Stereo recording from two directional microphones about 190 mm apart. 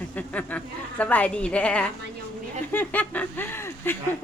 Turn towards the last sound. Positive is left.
turn(degrees=10)  # may be behind; listen again after turning